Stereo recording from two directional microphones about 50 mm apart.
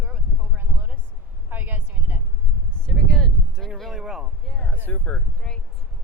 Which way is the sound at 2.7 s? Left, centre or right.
Centre.